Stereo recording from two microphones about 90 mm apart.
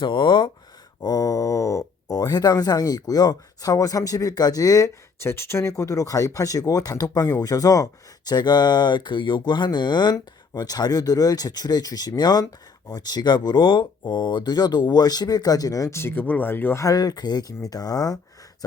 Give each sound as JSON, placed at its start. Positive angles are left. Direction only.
{"t": 0.0, "sound": "speech", "side_deg": 60}
{"t": 1.0, "sound": "speech", "side_deg": 40}
{"t": 5.3, "sound": "speech", "side_deg": 30}
{"t": 16.8, "sound": "speech", "side_deg": 45}